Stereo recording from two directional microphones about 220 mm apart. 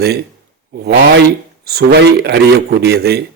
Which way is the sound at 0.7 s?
50° right (ahead or behind).